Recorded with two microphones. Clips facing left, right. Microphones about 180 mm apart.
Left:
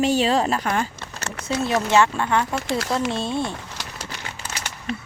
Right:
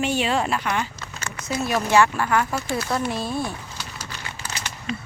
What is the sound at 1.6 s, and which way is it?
Speech, 20° left (ahead or behind).